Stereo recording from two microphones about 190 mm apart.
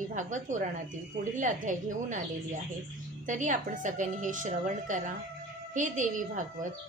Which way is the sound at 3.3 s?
40° right (ahead or behind).